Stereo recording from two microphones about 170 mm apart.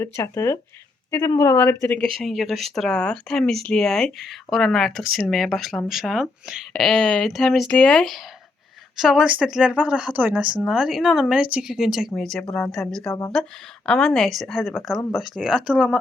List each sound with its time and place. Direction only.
0.0 s speech: 15° left (ahead or behind)
2.1 s speech: centre (ahead or behind)
13.1 s speech: 20° left (ahead or behind)
13.8 s speech: 5° left (ahead or behind)